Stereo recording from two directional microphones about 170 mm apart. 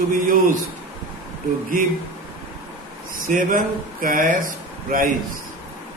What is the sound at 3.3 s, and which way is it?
A man's voice, 50° right (ahead or behind).